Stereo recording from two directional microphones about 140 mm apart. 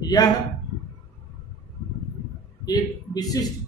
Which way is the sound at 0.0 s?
30° left (ahead or behind).